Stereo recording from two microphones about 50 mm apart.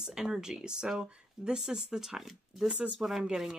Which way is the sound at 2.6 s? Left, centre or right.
Right.